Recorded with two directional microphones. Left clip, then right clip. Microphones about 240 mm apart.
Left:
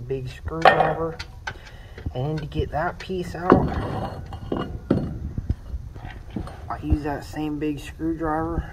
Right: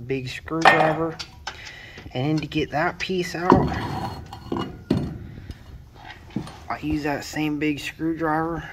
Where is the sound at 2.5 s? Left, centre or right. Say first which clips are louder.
Even; right.